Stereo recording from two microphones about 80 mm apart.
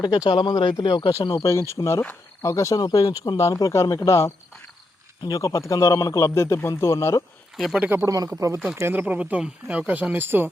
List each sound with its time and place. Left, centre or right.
0.3 s speech: left
0.8 s speech: left
1.3 s speech: left
2.7 s speech: left
3.4 s speech: left
7.5 s speech: centre
7.8 s speech: right
8.0 s speech: right
8.7 s speech: right